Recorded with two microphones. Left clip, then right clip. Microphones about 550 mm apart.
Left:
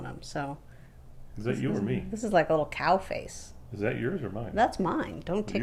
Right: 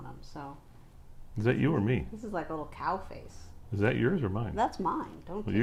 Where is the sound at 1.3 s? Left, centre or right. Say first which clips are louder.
Right 3 dB; right.